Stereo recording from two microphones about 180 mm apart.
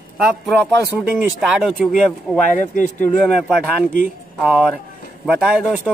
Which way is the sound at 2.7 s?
45° left (ahead or behind).